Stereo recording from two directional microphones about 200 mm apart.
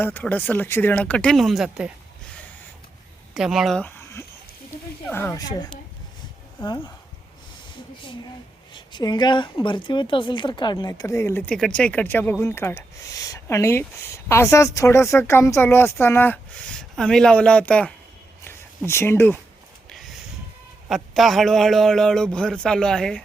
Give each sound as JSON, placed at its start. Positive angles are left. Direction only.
{"t": 0.0, "sound": "speech", "side_deg": 10}
{"t": 3.3, "sound": "speech", "side_deg": 0}
{"t": 8.7, "sound": "speech", "side_deg": 20}
{"t": 18.4, "sound": "a sound", "side_deg": 10}
{"t": 19.9, "sound": "a sound", "side_deg": 0}
{"t": 20.9, "sound": "a man's voice", "side_deg": 0}